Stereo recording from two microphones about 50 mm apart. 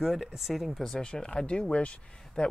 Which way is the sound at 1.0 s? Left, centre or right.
Centre.